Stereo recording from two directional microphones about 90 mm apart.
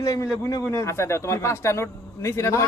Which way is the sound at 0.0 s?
35° left (ahead or behind).